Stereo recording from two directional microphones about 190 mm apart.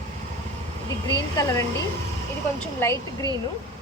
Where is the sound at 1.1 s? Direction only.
20° left (ahead or behind).